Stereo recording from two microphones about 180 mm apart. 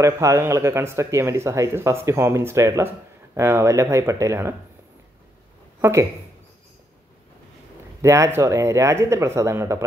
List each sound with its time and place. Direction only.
0.0 s speech: 15° right (ahead or behind)
5.8 s a woman's voice: 15° right (ahead or behind)
8.0 s speech: 15° right (ahead or behind)